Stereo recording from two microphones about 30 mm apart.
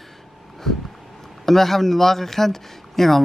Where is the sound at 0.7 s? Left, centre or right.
Centre.